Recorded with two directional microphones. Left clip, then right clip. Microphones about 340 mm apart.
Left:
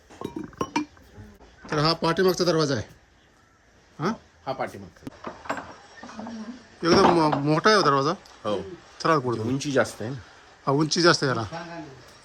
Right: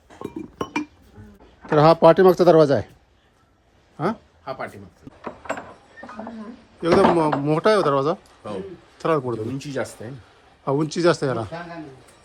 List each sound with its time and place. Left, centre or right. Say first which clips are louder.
0.2 s music: right 1 dB; centre
1.6 s a man's voice: right 11 dB; centre
3.9 s speech: right 4 dB; centre
4.4 s speech: left 1 dB; left
6.8 s a man's voice: right 2 dB; centre
9.6 s speech: left 5 dB; left
10.7 s speech: even; centre